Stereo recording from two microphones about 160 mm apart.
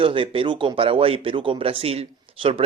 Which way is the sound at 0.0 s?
35° right (ahead or behind).